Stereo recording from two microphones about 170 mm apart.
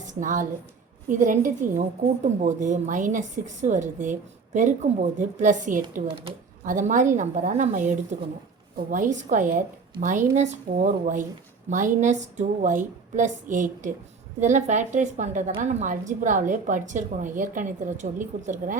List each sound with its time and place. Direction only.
0.0 s a woman's voice: 45° right (ahead or behind)
5.8 s speech: 30° right (ahead or behind)
6.7 s a woman's voice: 45° right (ahead or behind)